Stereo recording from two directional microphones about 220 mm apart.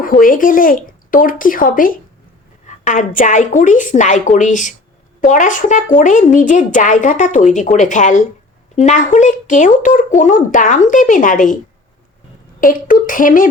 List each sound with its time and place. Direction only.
0.0 s speech: 40° left (ahead or behind)